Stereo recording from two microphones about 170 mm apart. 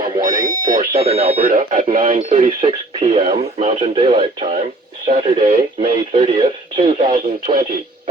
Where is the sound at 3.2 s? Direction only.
45° right (ahead or behind).